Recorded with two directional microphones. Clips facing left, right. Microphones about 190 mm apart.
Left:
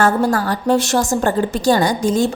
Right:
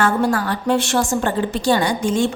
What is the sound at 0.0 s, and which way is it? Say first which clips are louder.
A woman's voice: left 2 dB; 40° left (ahead or behind).